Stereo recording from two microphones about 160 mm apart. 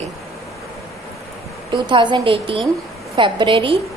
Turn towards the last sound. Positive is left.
turn(degrees=-30)  # may be behind; listen again after turning